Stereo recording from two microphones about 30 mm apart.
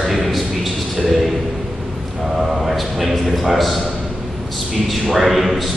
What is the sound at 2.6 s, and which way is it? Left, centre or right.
A man's voice, centre.